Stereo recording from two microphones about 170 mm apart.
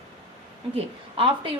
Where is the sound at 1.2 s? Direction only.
30° right (ahead or behind).